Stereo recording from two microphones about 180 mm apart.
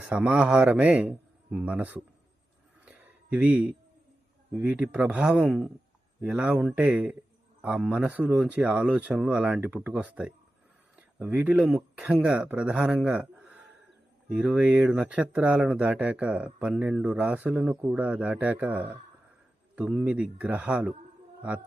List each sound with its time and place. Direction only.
0.0 s speech: 10° right (ahead or behind)
2.8 s a sound: 5° right (ahead or behind)
4.5 s speech: 10° right (ahead or behind)